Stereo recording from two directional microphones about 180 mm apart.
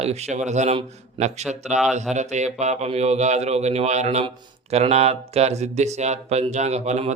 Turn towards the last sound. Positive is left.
turn(degrees=-35)  # may be behind; listen again after turning